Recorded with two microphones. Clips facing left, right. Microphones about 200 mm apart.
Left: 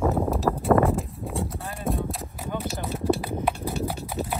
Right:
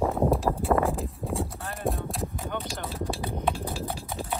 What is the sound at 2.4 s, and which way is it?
Clip-clop, 10° left (ahead or behind).